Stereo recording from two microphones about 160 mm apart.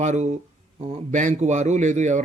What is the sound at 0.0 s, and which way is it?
Speech, 45° right (ahead or behind).